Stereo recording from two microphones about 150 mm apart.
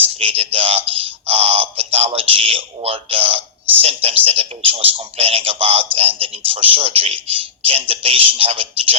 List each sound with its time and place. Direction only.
0.2 s a man's voice: 40° right (ahead or behind)